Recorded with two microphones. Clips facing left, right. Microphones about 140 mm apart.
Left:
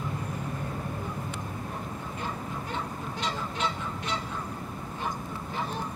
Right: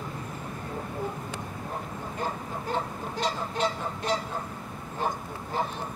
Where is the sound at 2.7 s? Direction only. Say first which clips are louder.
Right 7 dB; 40° right (ahead or behind).